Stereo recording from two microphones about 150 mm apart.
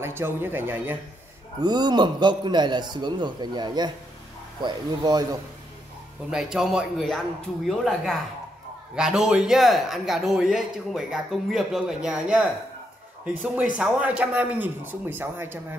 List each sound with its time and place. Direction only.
0.0 s speech: 15° right (ahead or behind)
1.6 s a man's voice: 30° right (ahead or behind)
6.3 s a man's voice: 5° right (ahead or behind)
13.7 s speech: 5° right (ahead or behind)